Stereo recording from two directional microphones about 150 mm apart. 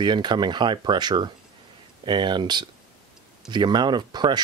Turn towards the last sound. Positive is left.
turn(degrees=-30)  # may be behind; listen again after turning